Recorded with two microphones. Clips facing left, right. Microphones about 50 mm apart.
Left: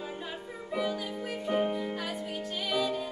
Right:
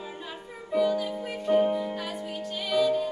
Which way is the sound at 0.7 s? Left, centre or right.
Centre.